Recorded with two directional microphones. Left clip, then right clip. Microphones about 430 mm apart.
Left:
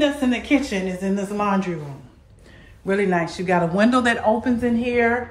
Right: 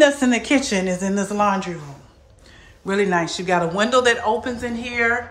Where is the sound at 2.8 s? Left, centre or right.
Centre.